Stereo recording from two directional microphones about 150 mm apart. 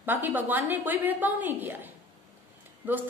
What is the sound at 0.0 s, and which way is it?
A woman's voice, 15° right (ahead or behind).